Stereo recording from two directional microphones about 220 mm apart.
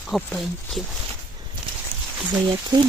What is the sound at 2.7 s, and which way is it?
Speech, 20° right (ahead or behind).